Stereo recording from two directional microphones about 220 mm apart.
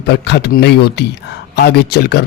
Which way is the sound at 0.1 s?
50° left (ahead or behind).